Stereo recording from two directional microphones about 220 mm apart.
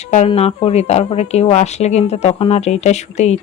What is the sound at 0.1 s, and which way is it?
Speech, 30° left (ahead or behind).